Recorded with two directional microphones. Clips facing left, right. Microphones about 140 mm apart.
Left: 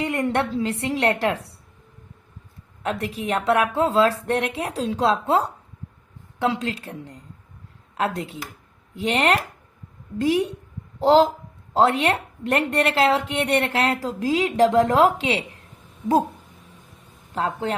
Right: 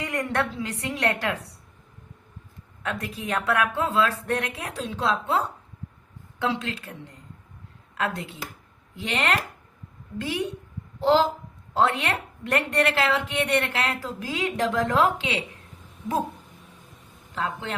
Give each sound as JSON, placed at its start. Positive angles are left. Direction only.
{"t": 0.0, "sound": "a woman's voice", "side_deg": 25}
{"t": 2.8, "sound": "a woman's voice", "side_deg": 30}
{"t": 11.7, "sound": "a woman's voice", "side_deg": 30}
{"t": 17.3, "sound": "a woman's voice", "side_deg": 40}